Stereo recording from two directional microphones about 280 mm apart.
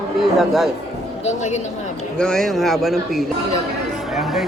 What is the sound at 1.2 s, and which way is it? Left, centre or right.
Speech, left.